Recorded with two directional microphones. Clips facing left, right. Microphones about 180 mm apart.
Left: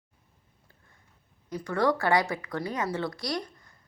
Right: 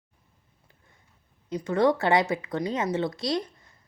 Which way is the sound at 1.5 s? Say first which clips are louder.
Right 4 dB; 20° right (ahead or behind).